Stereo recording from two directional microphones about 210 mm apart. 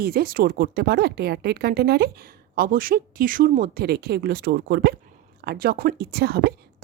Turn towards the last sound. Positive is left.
turn(degrees=-50)  # may be behind; listen again after turning